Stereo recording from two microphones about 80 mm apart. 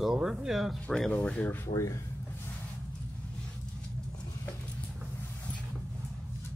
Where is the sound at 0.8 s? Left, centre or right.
Centre.